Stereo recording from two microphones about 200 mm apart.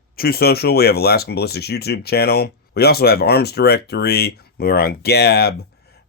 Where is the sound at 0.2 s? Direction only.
50° left (ahead or behind).